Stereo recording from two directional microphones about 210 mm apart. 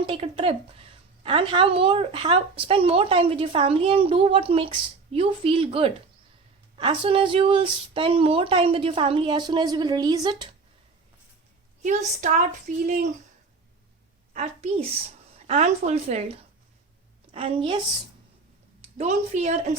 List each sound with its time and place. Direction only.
0.0 s a woman's voice: 25° right (ahead or behind)
11.8 s speech: 35° right (ahead or behind)
14.3 s a woman's voice: 30° right (ahead or behind)
18.8 s a woman's voice: 30° right (ahead or behind)